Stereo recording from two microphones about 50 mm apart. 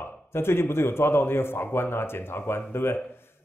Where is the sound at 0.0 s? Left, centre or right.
Left.